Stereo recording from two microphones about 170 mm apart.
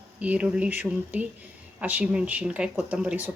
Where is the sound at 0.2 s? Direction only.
5° right (ahead or behind).